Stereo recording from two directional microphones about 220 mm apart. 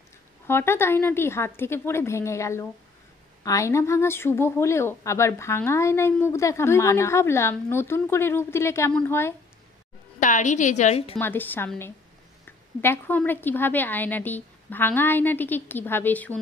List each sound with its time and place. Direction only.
0.5 s a woman's voice: 10° left (ahead or behind)
10.2 s a woman's voice: 35° left (ahead or behind)
11.1 s a woman's voice: 10° left (ahead or behind)